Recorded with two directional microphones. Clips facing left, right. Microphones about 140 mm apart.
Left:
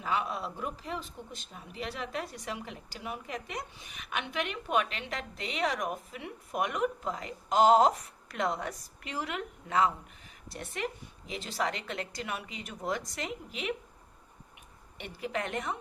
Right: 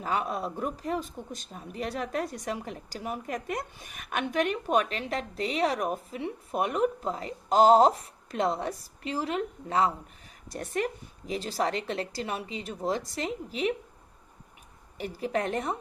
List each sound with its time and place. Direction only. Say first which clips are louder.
0.0 s speech: right 3 dB; 45° right (ahead or behind)
10.5 s speech: right 6 dB; 45° right (ahead or behind)
14.9 s speech: right 6 dB; 40° right (ahead or behind)